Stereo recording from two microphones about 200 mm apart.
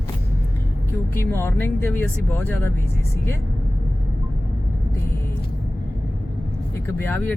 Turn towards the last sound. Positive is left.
turn(degrees=10)  # may be behind; listen again after turning